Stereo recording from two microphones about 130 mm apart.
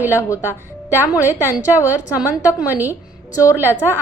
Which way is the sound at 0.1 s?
20° left (ahead or behind).